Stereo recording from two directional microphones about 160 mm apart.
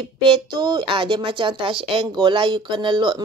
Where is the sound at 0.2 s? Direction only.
30° right (ahead or behind).